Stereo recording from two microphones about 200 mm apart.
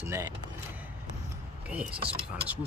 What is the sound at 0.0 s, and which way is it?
Speech, 15° right (ahead or behind).